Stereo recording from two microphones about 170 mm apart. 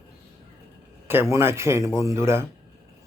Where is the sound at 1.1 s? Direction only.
15° right (ahead or behind).